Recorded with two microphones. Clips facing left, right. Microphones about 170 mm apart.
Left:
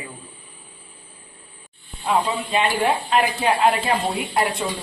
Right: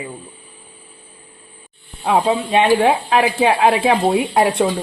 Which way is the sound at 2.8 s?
90° right.